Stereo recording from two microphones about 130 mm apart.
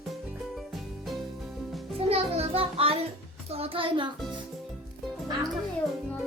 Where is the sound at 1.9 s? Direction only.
50° right (ahead or behind).